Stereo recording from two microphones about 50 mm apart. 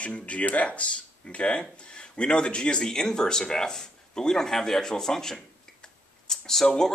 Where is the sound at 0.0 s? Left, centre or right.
Left.